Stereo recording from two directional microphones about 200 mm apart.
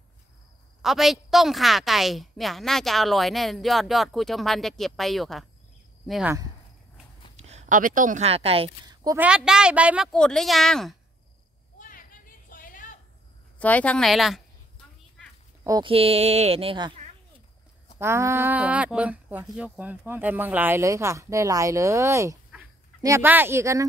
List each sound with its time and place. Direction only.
0.8 s a woman's voice: centre (ahead or behind)
7.3 s speech: 35° right (ahead or behind); by 9.2 s 20° right (ahead or behind)
9.2 s a woman's voice: 5° right (ahead or behind)
11.9 s a sound: 45° left (ahead or behind)
13.6 s a woman's voice: 5° left (ahead or behind)
15.6 s speech: 15° right (ahead or behind)
15.9 s speech: 30° right (ahead or behind)
17.9 s speech: 15° right (ahead or behind)